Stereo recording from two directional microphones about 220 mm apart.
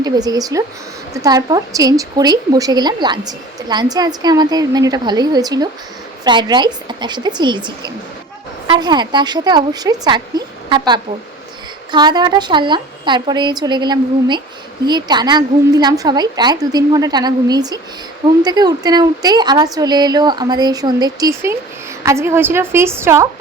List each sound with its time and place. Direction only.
0.0 s a woman's voice: 15° right (ahead or behind)